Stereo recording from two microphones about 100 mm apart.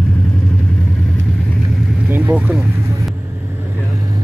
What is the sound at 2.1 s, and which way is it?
Vehicle, 20° right (ahead or behind).